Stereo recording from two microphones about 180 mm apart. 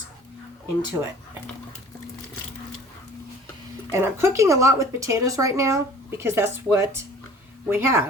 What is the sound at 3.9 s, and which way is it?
Speech, 15° right (ahead or behind).